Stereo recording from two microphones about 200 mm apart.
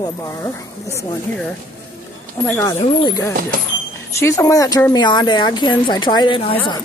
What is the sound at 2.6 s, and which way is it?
Speech, 20° left (ahead or behind).